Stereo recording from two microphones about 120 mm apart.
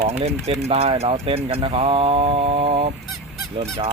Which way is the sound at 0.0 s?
60° right (ahead or behind).